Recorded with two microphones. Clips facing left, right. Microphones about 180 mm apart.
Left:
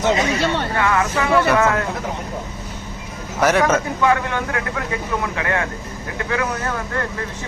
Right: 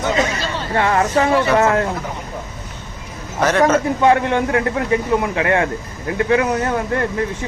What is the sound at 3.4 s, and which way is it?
Speech, 10° left (ahead or behind).